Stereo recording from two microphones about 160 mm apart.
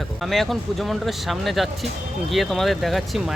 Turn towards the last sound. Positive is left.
turn(degrees=0)  # may be behind; listen again after turning